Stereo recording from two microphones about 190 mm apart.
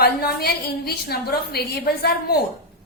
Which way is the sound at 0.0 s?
55° left (ahead or behind).